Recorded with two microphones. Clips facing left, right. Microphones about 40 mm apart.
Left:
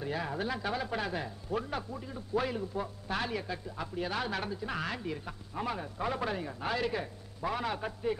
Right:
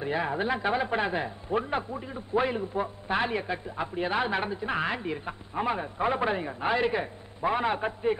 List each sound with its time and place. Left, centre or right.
0.0 s a man's voice: right